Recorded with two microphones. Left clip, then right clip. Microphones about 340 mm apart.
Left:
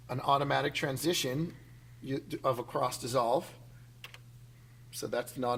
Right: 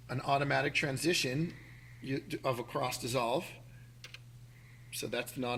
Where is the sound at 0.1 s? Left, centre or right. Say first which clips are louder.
Left 3 dB; left.